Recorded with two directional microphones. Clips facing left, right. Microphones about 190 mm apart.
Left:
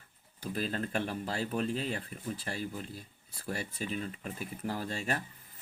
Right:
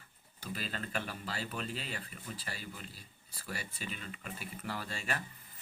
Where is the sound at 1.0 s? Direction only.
50° left (ahead or behind).